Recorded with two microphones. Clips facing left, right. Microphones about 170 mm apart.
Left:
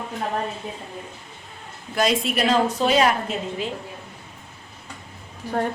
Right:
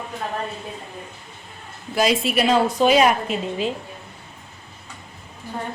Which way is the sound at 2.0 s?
5° right (ahead or behind).